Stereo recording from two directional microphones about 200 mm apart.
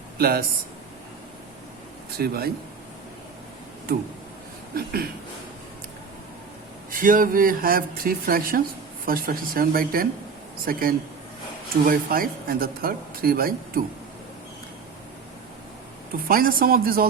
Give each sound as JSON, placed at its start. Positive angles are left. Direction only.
{"t": 0.2, "sound": "speech", "side_deg": -50}
{"t": 2.1, "sound": "speech", "side_deg": -50}
{"t": 4.7, "sound": "speech", "side_deg": -50}
{"t": 6.9, "sound": "speech", "side_deg": -45}
{"t": 16.1, "sound": "speech", "side_deg": -45}